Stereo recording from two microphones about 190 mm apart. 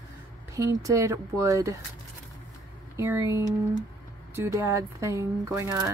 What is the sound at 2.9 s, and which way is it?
Speech, 15° right (ahead or behind).